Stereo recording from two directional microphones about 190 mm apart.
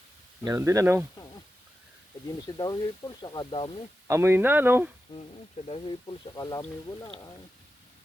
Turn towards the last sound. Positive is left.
turn(degrees=20)  # may be behind; listen again after turning